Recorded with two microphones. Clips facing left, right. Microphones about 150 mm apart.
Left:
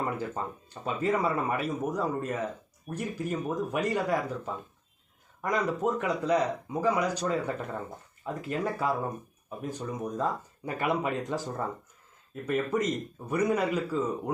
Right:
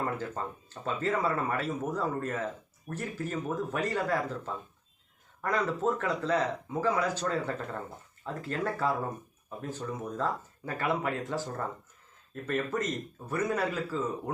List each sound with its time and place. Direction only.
0.0 s speech: 15° left (ahead or behind)